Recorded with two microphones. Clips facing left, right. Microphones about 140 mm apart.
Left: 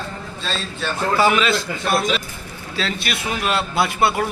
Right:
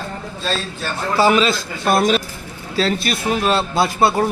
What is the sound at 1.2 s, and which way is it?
A man's voice, 35° right (ahead or behind).